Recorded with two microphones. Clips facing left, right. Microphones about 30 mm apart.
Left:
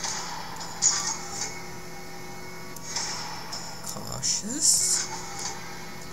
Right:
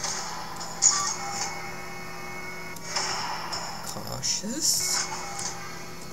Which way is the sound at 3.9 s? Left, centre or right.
Centre.